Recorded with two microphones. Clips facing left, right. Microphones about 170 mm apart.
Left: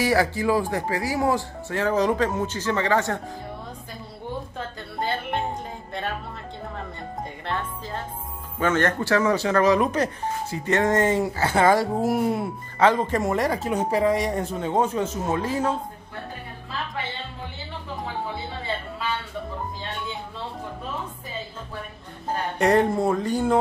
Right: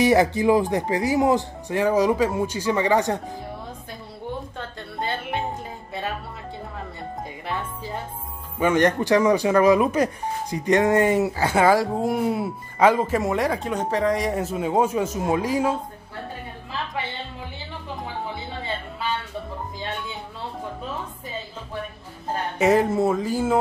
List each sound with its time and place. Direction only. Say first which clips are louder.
0.0 s speech: right 4 dB; 20° right (ahead or behind)
4.6 s speech: left 1 dB; centre (ahead or behind)
7.4 s speech: even; 10° right (ahead or behind)
22.6 s speech: right 1 dB; 5° right (ahead or behind)